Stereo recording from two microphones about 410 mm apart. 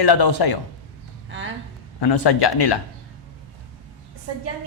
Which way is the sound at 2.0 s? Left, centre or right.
Left.